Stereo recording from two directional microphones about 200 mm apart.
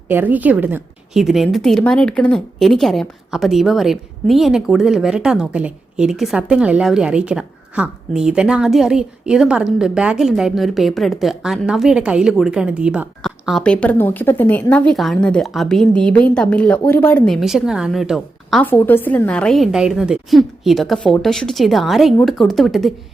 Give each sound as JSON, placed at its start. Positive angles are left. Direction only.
{"t": 0.1, "sound": "a woman's voice", "side_deg": -10}
{"t": 18.6, "sound": "a woman's voice", "side_deg": 10}